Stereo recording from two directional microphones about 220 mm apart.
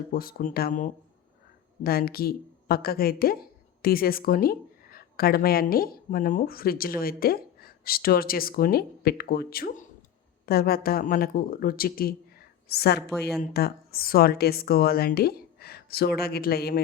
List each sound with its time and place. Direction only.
0.1 s a woman's voice: 40° left (ahead or behind)